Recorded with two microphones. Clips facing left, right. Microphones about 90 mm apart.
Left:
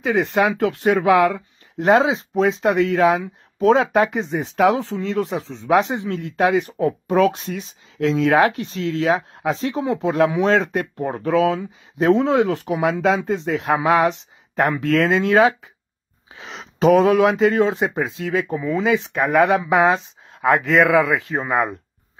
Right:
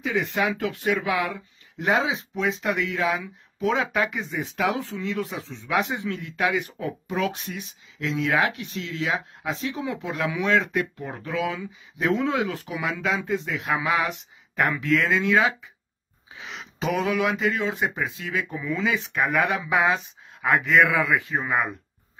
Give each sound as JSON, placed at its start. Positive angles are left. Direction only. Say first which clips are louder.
{"t": 0.0, "sound": "speech", "louder": "left 7 dB", "side_deg": 45}
{"t": 2.0, "sound": "speech", "louder": "left 8 dB", "side_deg": 35}
{"t": 16.8, "sound": "speech", "louder": "left 10 dB", "side_deg": 45}
{"t": 21.3, "sound": "speech", "louder": "left 3 dB", "side_deg": 35}